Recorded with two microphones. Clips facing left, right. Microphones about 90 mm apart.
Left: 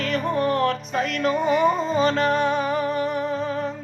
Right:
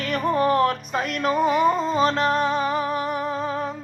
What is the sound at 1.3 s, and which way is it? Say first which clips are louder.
Music: right 1 dB; 5° right (ahead or behind).